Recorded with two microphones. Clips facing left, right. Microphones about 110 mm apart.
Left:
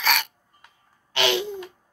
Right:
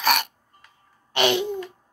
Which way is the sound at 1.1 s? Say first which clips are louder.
Right 2 dB; 40° right (ahead or behind).